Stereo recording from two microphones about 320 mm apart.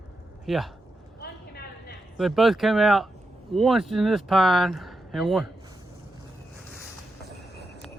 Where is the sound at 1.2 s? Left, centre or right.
Left.